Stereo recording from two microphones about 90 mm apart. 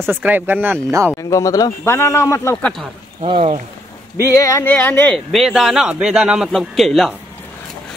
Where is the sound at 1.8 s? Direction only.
30° left (ahead or behind).